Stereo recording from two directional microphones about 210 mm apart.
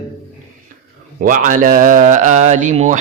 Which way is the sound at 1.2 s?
40° right (ahead or behind).